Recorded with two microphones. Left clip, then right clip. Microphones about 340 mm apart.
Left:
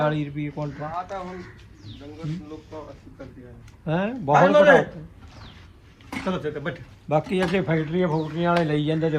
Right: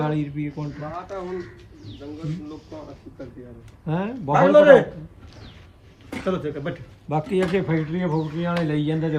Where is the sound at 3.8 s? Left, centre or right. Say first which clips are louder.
Left 2 dB; centre.